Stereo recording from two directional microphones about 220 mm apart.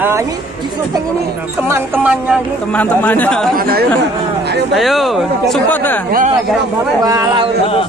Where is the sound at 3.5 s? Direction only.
45° right (ahead or behind).